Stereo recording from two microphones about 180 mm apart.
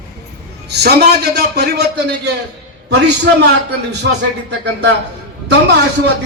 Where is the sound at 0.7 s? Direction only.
65° right (ahead or behind).